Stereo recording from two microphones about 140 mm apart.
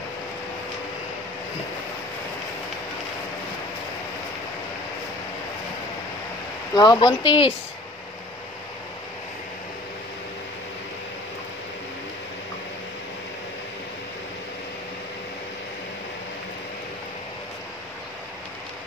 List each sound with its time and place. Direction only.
6.7 s speech: 30° left (ahead or behind)